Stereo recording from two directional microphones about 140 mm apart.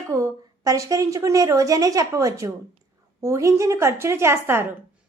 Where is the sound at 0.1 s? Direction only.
25° right (ahead or behind).